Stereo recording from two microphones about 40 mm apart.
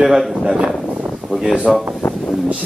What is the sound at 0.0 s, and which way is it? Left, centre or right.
Speech, centre.